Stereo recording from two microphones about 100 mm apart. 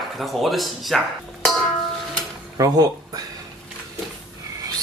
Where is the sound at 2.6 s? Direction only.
40° right (ahead or behind).